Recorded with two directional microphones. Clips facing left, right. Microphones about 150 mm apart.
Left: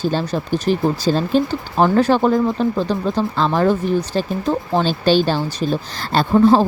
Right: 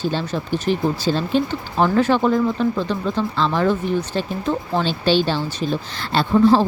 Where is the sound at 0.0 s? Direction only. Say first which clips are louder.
Left 3 dB; 40° left (ahead or behind).